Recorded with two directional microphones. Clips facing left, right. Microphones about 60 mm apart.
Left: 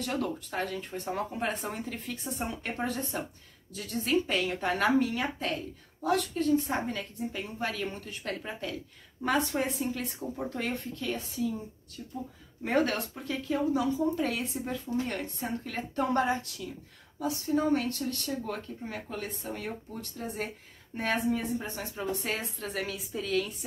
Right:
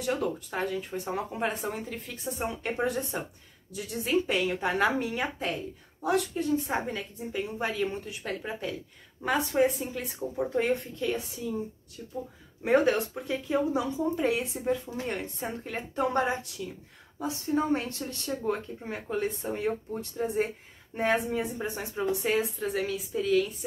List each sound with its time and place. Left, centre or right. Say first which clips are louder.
0.0 s speech: right 3 dB; centre
10.3 s speech: right 8 dB; right
12.6 s speech: right 4 dB; centre